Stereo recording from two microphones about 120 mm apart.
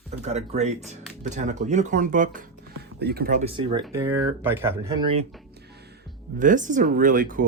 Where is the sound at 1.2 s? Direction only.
85° right.